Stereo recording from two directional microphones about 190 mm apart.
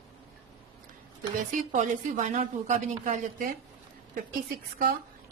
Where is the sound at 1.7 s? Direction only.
40° right (ahead or behind).